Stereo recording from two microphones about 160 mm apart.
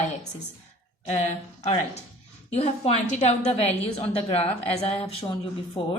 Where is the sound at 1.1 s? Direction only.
45° left (ahead or behind).